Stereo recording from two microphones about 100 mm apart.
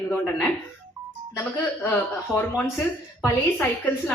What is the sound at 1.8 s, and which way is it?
A woman's voice, 20° left (ahead or behind).